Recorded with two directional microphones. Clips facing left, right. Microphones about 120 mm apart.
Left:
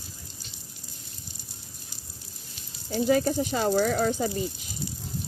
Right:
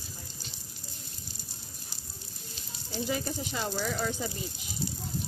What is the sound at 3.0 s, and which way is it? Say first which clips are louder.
Speech: left 10 dB; 55° left (ahead or behind).